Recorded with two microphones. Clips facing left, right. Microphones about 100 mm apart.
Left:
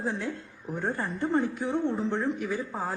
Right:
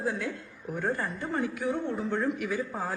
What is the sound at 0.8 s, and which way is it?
Speech, 15° left (ahead or behind).